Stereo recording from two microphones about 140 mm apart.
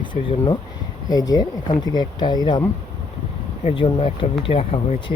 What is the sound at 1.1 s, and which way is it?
Speech, 25° left (ahead or behind).